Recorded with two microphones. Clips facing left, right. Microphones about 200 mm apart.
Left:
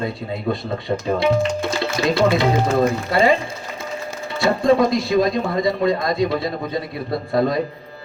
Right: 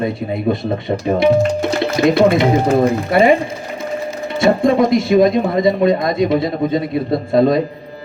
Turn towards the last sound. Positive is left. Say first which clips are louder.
# right 6 dB
turn(degrees=-20)  # may be behind; listen again after turning